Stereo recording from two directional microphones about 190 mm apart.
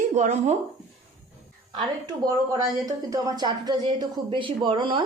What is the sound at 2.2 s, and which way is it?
Speech, 20° right (ahead or behind).